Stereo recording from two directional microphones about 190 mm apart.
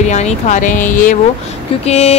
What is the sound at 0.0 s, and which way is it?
Speech, 35° left (ahead or behind).